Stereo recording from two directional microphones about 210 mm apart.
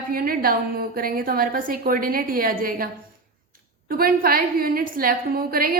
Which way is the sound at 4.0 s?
45° right (ahead or behind).